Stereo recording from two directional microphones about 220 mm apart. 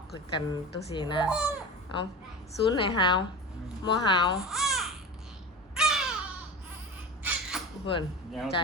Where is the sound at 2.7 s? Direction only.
20° left (ahead or behind).